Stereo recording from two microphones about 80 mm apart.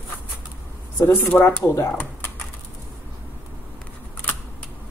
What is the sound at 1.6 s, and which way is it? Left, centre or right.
Speech, left.